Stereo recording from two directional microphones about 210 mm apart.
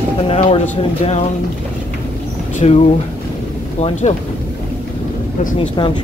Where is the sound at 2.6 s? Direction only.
30° left (ahead or behind).